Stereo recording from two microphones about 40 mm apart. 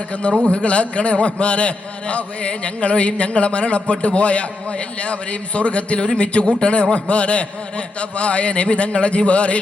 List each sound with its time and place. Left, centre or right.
0.1 s a man's voice: left